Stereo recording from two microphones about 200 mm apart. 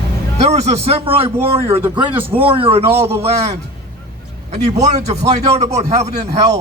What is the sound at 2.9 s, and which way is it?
Speech, 10° right (ahead or behind).